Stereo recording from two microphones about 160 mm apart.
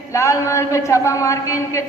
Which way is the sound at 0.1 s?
20° left (ahead or behind).